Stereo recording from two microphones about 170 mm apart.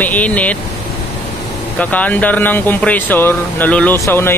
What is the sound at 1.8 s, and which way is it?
Speech, 10° left (ahead or behind).